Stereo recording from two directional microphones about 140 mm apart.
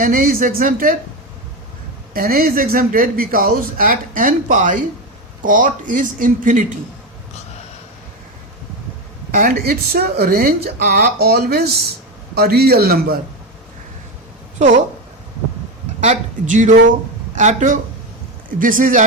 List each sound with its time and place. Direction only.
0.0 s speech: 75° right (ahead or behind)
2.1 s speech: 90° right; by 6.7 s 70° right (ahead or behind)
9.3 s speech: 90° right
14.6 s speech: 55° right (ahead or behind)
16.0 s speech: 60° right (ahead or behind)
18.6 s speech: 75° right (ahead or behind)